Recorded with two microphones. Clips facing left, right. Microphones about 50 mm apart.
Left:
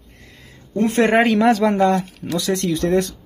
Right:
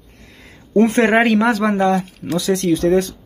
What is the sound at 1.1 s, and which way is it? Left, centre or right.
Speech, centre.